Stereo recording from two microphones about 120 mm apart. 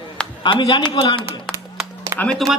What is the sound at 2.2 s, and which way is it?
Speech, 5° left (ahead or behind).